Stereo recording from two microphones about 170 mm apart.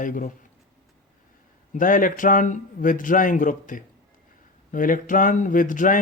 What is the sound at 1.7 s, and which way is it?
A man's voice, 50° left (ahead or behind).